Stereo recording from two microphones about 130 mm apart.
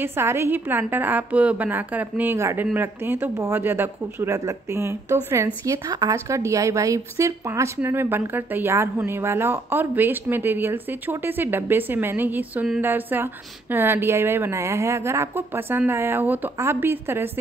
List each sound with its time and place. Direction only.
0.0 s speech: 20° right (ahead or behind)